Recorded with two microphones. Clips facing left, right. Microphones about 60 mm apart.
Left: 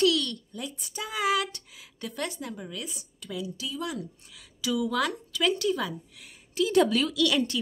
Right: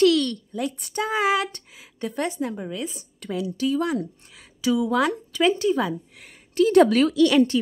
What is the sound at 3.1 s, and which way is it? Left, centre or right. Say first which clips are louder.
A woman's voice: right 8 dB; right.